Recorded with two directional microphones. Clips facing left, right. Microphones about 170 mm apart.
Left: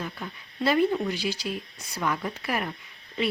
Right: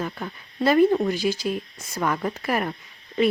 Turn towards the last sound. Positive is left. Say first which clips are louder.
# right 7 dB
turn(degrees=-45)  # may be behind; listen again after turning